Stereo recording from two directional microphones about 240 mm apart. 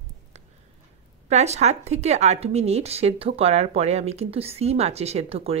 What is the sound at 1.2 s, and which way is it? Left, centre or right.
Speech, right.